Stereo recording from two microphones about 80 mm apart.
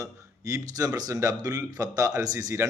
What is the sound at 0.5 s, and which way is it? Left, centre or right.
Speech, right.